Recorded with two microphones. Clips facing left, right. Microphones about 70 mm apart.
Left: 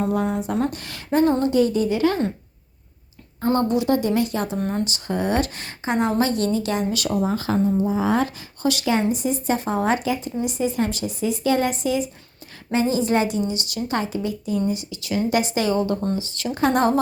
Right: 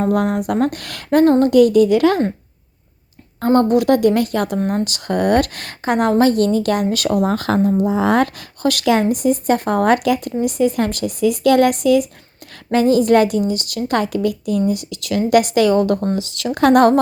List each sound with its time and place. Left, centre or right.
0.0 s speech: right
1.5 s a child's voice: right
3.4 s speech: right
16.1 s speech: right